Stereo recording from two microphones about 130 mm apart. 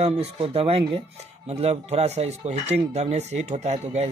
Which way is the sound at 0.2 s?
50° right (ahead or behind).